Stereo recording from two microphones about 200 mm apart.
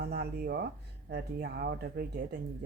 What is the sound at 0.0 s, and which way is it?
Speech, 55° right (ahead or behind).